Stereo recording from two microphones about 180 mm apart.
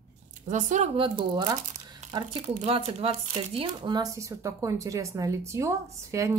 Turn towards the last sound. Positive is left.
turn(degrees=-15)  # may be behind; listen again after turning